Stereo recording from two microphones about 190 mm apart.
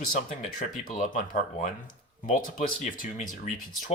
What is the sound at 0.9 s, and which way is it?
Speech, 45° left (ahead or behind).